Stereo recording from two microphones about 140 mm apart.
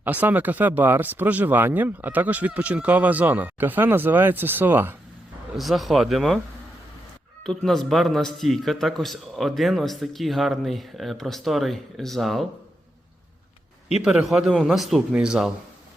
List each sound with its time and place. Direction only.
0.0 s speech: 10° right (ahead or behind)
5.5 s speech: centre (ahead or behind)
7.4 s speech: 5° left (ahead or behind)
14.0 s speech: 5° right (ahead or behind)